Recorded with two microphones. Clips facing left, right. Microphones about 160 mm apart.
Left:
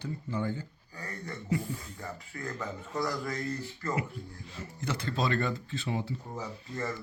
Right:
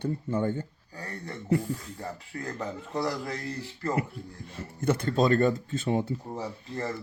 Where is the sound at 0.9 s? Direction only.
30° right (ahead or behind).